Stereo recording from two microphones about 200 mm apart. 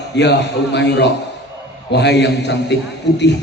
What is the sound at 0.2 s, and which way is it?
A man's voice, 60° left (ahead or behind).